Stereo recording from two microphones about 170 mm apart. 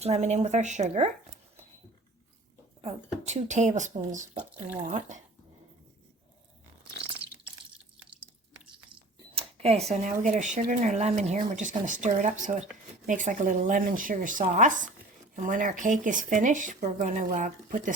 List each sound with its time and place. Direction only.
0.0 s speech: 40° right (ahead or behind)
2.8 s speech: 40° right (ahead or behind)
8.9 s a sound: 35° right (ahead or behind)
9.9 s speech: 45° right (ahead or behind)